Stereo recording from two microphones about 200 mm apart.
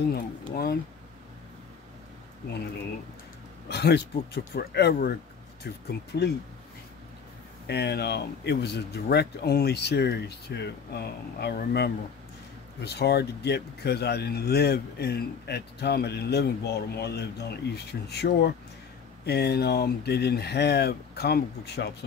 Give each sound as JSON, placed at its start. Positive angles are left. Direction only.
{"t": 0.1, "sound": "speech", "side_deg": 50}
{"t": 3.6, "sound": "speech", "side_deg": 55}
{"t": 7.6, "sound": "speech", "side_deg": 55}